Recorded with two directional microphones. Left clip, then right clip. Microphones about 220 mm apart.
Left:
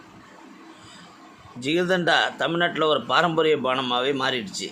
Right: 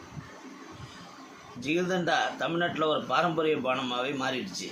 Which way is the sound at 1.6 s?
40° left (ahead or behind).